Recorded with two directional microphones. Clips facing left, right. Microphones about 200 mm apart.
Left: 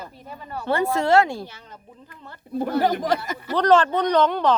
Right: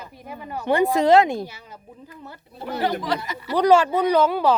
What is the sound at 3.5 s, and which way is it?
Speech, 10° right (ahead or behind).